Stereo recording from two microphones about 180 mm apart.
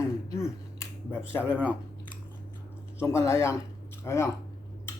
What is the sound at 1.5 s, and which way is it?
Speech, 5° right (ahead or behind).